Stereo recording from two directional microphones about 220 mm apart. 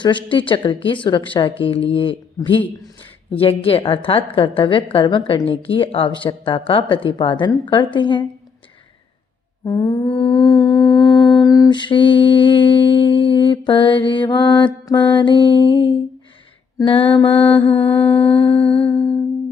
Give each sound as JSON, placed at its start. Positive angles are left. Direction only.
{"t": 0.0, "sound": "humming", "side_deg": 20}
{"t": 9.6, "sound": "mantra", "side_deg": 15}
{"t": 10.1, "sound": "humming", "side_deg": 20}
{"t": 17.7, "sound": "mantra", "side_deg": 10}
{"t": 18.3, "sound": "humming", "side_deg": 25}